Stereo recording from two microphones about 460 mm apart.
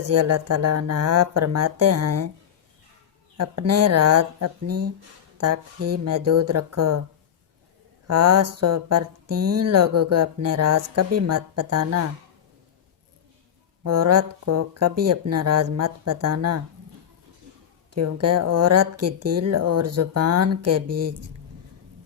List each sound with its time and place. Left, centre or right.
0.0 s speech: right
3.3 s speech: right
8.0 s speech: right
13.8 s speech: right
17.9 s speech: right